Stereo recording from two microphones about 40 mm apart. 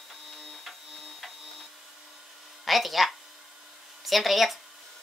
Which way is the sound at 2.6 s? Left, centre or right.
Centre.